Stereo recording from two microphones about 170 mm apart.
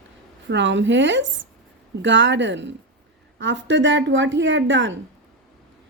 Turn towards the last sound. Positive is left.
turn(degrees=-90)